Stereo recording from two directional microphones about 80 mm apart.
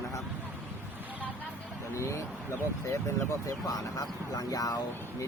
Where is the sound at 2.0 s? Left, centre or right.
Left.